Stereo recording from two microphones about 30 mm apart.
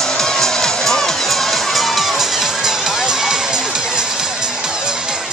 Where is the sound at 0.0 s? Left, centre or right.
Centre; by 4.9 s right.